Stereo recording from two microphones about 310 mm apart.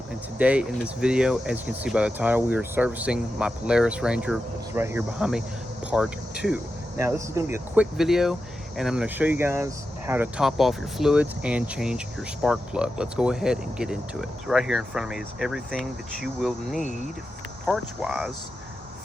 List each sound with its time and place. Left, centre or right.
0.1 s speech: centre
5.8 s cricket: centre
7.0 s speech: centre
16.8 s speech: left
17.7 s speech: centre